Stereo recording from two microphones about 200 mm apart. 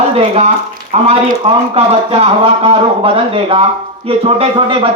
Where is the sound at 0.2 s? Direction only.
30° right (ahead or behind).